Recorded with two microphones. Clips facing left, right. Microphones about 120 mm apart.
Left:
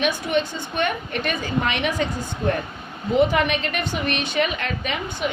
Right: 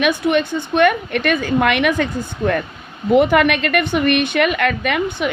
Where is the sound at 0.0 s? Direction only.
70° right (ahead or behind).